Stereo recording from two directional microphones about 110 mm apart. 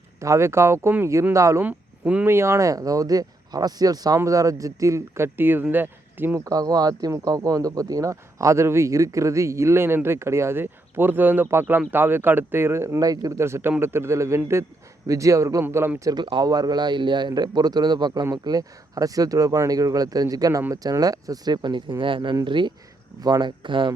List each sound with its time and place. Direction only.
0.2 s speech: 25° right (ahead or behind)
1.6 s speech: 15° right (ahead or behind)
2.3 s speech: 25° right (ahead or behind)
6.4 s speech: 35° right (ahead or behind)
13.4 s speech: 20° right (ahead or behind)
16.1 s speech: 45° right (ahead or behind)